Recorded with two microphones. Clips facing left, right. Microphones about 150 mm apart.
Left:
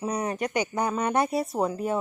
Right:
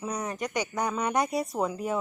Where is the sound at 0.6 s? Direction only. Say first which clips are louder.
Left 3 dB; 30° left (ahead or behind).